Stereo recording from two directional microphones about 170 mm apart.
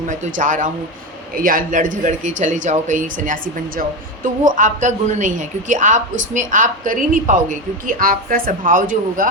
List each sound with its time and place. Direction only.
0.1 s a woman's voice: 50° right (ahead or behind)